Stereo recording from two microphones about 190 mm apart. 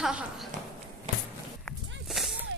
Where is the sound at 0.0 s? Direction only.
5° right (ahead or behind).